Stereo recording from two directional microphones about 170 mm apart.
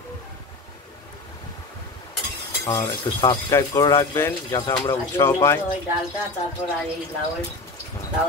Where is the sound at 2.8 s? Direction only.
25° left (ahead or behind).